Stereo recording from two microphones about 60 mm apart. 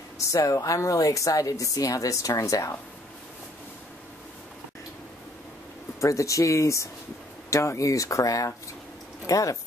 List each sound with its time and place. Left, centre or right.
0.2 s speech: left
5.9 s speech: left